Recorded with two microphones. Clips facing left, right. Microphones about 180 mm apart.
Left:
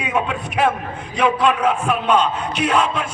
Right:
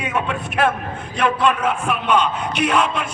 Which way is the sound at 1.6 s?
5° right (ahead or behind).